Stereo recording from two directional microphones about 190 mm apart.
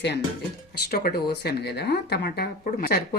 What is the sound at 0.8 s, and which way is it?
Speech, 55° left (ahead or behind).